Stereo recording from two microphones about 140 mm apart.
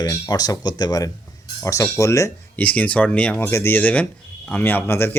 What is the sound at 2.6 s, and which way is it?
Speech, 10° left (ahead or behind).